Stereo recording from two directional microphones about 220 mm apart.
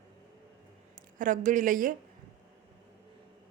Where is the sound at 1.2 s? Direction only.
35° right (ahead or behind).